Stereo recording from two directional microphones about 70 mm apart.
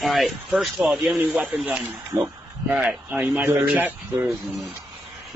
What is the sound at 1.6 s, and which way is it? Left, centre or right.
Speech, centre.